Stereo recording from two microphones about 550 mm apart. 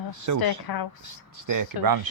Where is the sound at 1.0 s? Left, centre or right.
Right.